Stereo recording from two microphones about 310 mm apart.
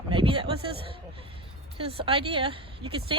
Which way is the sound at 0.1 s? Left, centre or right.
Centre.